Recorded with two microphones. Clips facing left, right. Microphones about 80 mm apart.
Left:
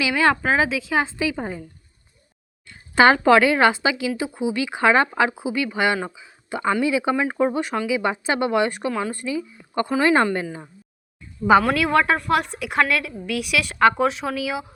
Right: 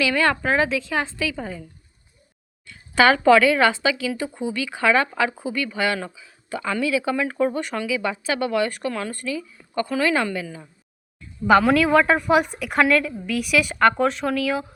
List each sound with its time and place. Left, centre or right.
0.0 s speech: centre
2.6 s speech: left
5.3 s speech: centre
6.1 s a sound: left
6.8 s speech: left
8.9 s speech: centre; by 10.4 s left
11.6 s a woman's voice: centre